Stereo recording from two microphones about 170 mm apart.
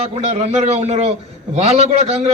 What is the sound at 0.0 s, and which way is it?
A man's voice, 40° right (ahead or behind).